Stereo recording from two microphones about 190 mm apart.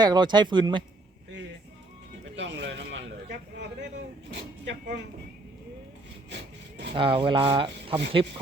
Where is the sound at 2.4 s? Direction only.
65° right (ahead or behind).